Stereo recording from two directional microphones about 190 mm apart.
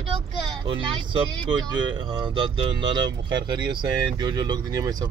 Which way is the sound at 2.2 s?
25° right (ahead or behind).